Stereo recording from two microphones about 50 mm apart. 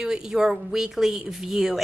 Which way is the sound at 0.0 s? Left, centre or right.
Centre.